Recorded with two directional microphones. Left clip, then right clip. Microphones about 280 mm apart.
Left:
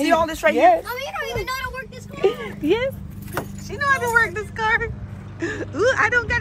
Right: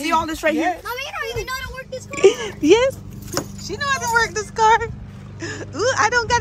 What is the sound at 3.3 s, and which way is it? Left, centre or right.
Speech, centre.